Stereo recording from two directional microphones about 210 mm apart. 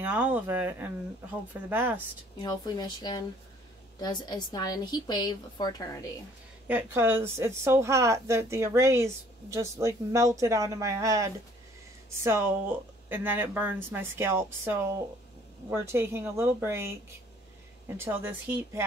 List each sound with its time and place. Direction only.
0.0 s a woman's voice: 10° right (ahead or behind)
2.3 s a woman's voice: 20° left (ahead or behind)
6.7 s a woman's voice: 10° right (ahead or behind)